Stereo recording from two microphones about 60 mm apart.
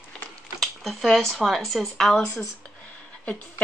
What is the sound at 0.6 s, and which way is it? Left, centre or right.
Speech, centre.